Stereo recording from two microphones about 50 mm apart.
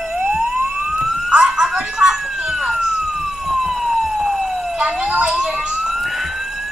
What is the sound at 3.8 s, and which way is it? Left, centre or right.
Police car, centre.